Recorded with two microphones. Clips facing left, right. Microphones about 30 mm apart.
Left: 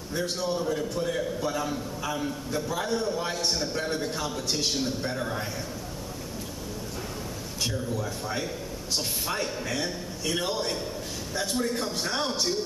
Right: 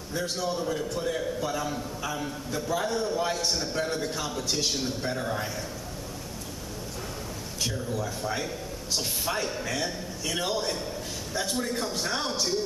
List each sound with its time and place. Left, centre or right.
0.4 s a man's voice: centre
8.2 s a man's voice: centre